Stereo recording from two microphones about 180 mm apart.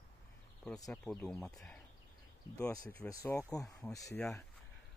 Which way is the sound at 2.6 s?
20° left (ahead or behind).